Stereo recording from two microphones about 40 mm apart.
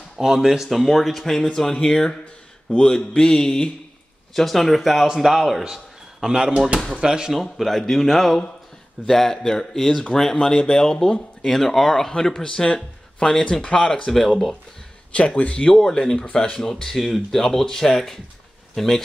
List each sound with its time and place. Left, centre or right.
0.2 s speech: centre
0.7 s speech: centre
1.2 s speech: centre
6.2 s speech: right
7.5 s speech: centre
11.5 s speech: centre
15.1 s speech: left; by 19.0 s centre